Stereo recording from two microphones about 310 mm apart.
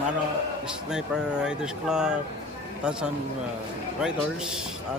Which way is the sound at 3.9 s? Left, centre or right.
Centre.